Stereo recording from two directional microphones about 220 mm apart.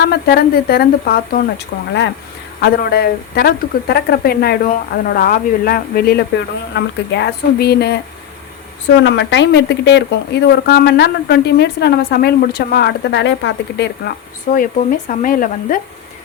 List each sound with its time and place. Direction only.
0.0 s a woman's voice: 45° left (ahead or behind)
9.0 s a woman's voice: 55° left (ahead or behind)
14.5 s speech: 40° left (ahead or behind)